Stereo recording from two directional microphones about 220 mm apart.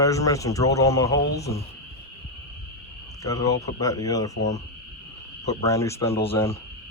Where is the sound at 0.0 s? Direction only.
15° left (ahead or behind).